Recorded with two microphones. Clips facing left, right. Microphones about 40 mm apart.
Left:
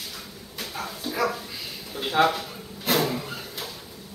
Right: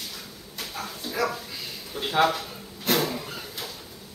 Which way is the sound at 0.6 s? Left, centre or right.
Centre.